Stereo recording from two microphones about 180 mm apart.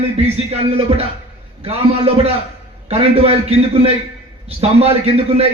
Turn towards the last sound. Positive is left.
turn(degrees=-35)  # may be behind; listen again after turning